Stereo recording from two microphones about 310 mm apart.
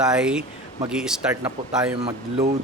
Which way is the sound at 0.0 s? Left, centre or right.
Centre.